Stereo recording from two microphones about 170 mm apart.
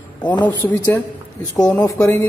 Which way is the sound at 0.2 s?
10° left (ahead or behind).